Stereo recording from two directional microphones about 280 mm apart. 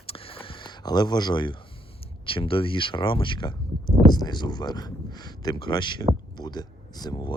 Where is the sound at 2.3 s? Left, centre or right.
Centre.